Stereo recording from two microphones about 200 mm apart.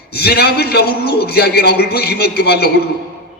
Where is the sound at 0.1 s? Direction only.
50° left (ahead or behind).